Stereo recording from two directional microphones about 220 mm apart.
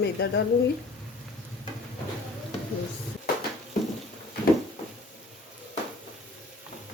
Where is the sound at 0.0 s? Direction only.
50° left (ahead or behind).